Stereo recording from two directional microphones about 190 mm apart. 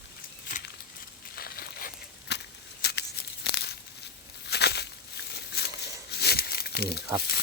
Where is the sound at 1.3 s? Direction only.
50° left (ahead or behind).